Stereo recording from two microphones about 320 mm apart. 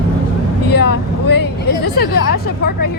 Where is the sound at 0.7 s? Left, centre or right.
Left.